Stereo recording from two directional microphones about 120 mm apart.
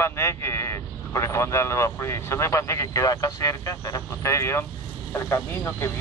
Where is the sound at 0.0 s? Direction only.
20° left (ahead or behind).